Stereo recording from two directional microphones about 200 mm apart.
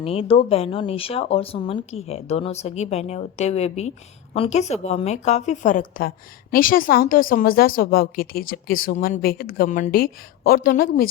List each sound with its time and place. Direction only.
0.0 s a woman's voice: 30° left (ahead or behind); by 11.1 s 45° left (ahead or behind)